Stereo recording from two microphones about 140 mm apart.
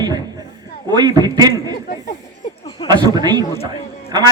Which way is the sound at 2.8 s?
30° right (ahead or behind).